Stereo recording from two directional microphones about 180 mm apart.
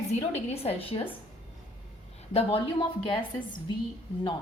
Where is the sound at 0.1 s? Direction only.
35° left (ahead or behind).